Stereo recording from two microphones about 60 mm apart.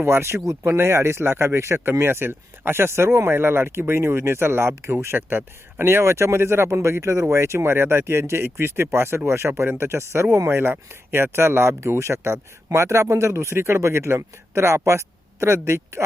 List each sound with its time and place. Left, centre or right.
0.0 s speech: right
5.8 s speech: right